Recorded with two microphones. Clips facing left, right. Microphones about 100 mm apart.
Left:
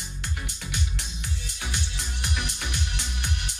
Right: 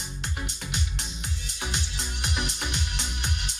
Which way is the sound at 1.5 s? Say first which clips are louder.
Right 2 dB; 25° right (ahead or behind).